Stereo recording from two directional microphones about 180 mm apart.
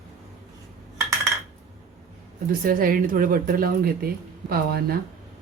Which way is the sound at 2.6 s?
50° right (ahead or behind).